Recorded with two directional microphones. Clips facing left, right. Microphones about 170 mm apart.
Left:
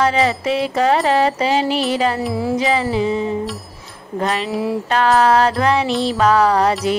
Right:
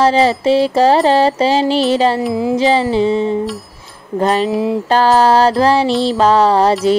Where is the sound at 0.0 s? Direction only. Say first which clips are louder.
Right 5 dB; 30° right (ahead or behind).